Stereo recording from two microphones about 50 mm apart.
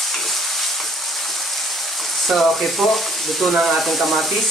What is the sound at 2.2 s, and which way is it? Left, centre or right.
Speech, centre.